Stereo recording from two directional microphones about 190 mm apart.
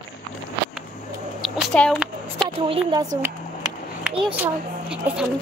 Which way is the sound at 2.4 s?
25° right (ahead or behind).